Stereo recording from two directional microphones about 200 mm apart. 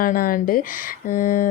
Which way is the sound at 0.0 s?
45° left (ahead or behind).